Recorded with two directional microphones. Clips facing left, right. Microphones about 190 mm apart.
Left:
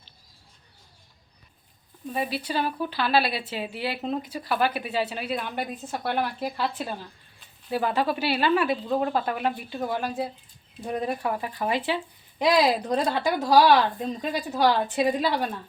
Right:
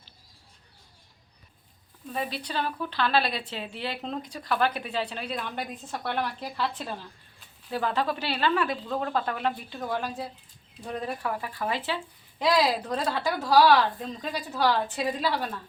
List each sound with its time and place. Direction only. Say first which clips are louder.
2.0 s a woman's voice: left 4 dB; 10° left (ahead or behind)